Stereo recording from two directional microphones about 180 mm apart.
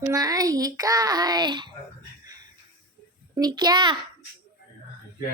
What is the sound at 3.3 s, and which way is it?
Speech, 20° right (ahead or behind).